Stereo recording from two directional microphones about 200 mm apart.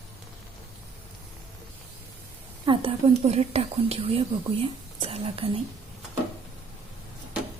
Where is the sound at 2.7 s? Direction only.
30° right (ahead or behind).